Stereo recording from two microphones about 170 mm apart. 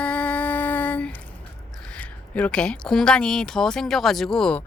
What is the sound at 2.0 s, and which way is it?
Speech, 10° left (ahead or behind).